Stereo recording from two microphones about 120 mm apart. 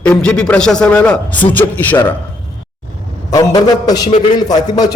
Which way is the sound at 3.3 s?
30° left (ahead or behind).